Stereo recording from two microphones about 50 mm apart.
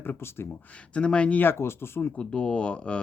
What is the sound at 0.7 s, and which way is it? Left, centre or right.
Speech, left.